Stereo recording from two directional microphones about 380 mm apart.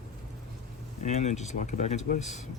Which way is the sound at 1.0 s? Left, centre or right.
Centre.